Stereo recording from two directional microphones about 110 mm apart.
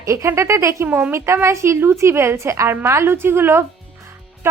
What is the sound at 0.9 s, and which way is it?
Speech, 15° right (ahead or behind).